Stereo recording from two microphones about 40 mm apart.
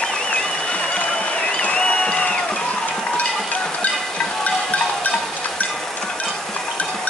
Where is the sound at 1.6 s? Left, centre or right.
Left.